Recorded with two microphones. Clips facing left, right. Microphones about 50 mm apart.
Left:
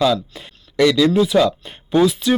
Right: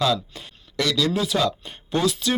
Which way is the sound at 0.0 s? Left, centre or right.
Centre.